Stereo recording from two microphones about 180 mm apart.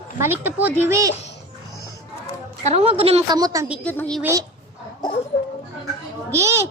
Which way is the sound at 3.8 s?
5° left (ahead or behind).